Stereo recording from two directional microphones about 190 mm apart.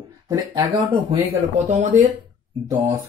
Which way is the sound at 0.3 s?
20° right (ahead or behind).